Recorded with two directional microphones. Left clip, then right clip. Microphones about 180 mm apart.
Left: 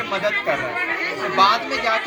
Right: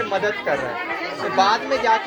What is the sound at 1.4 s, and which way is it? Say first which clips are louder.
Speech: left 1 dB; 50° right (ahead or behind).